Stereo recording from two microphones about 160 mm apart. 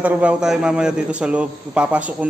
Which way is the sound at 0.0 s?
10° right (ahead or behind).